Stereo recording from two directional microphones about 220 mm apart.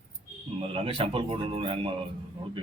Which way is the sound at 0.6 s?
25° right (ahead or behind).